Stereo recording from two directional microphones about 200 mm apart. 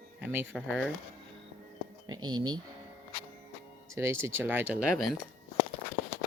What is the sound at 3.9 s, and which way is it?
Speech, 15° right (ahead or behind).